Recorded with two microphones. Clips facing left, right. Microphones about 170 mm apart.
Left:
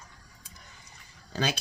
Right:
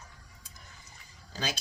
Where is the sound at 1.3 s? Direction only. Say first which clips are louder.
Left 6 dB; 60° left (ahead or behind).